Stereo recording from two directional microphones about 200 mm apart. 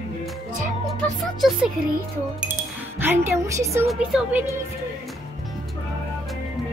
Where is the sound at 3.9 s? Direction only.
5° right (ahead or behind).